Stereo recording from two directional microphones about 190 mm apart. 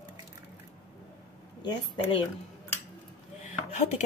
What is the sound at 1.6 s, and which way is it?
Speech, 25° left (ahead or behind).